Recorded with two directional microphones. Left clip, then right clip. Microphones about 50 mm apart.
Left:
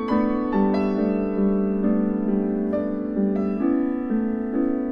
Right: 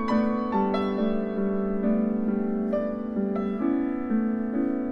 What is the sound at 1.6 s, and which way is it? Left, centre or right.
Music, centre.